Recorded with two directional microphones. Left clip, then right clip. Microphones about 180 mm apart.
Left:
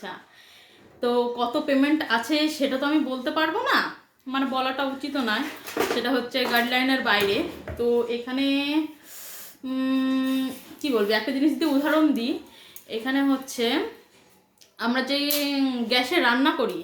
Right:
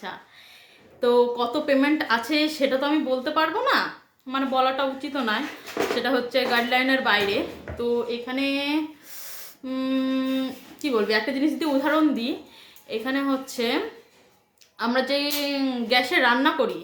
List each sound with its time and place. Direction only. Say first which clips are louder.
1.0 s a woman's voice: right 3 dB; 15° right (ahead or behind)
14.8 s a woman's voice: right 2 dB; 15° right (ahead or behind)